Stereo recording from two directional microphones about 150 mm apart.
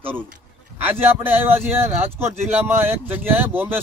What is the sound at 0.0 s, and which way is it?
A man's voice, 15° right (ahead or behind).